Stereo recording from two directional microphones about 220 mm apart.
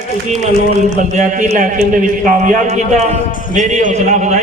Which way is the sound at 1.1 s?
35° right (ahead or behind).